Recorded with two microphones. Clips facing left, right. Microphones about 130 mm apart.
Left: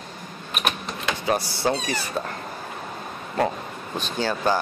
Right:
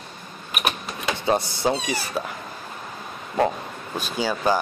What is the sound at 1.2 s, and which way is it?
Speech, 25° right (ahead or behind).